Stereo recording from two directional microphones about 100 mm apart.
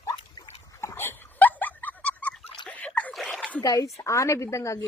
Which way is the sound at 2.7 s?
15° left (ahead or behind).